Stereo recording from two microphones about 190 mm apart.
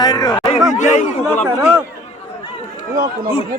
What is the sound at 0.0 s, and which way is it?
Speech, 20° left (ahead or behind).